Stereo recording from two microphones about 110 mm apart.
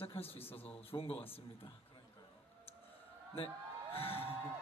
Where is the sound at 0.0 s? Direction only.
60° left (ahead or behind).